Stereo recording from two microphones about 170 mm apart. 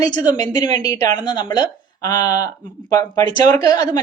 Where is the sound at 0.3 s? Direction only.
25° left (ahead or behind).